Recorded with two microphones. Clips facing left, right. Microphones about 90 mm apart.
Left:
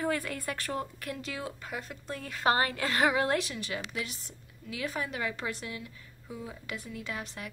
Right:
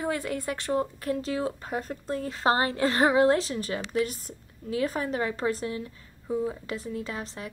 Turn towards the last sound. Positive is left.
turn(degrees=-30)  # may be behind; listen again after turning